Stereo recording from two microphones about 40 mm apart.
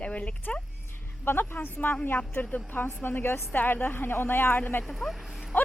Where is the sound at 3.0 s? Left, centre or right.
Left.